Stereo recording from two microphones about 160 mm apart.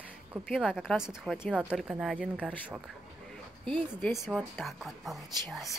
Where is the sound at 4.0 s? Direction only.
Centre (ahead or behind).